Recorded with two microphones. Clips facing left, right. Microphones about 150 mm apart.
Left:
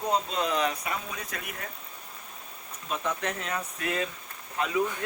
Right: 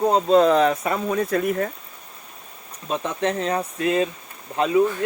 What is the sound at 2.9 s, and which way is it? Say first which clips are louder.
Speech: right 7 dB; 30° right (ahead or behind).